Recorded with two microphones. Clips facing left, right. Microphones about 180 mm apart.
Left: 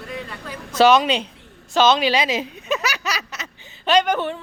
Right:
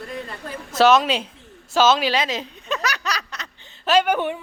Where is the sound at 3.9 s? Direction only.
10° right (ahead or behind).